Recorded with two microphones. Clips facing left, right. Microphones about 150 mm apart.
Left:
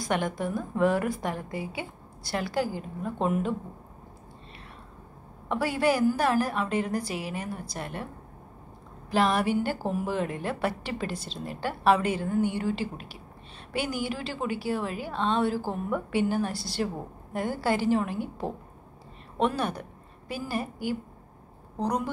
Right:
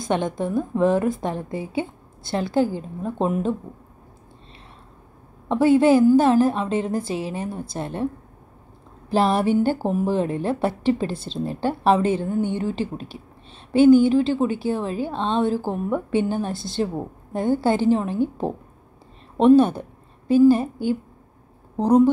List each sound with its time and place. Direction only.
0.0 s a woman's voice: 20° right (ahead or behind)
5.5 s a woman's voice: 25° right (ahead or behind)
9.1 s a woman's voice: 30° right (ahead or behind)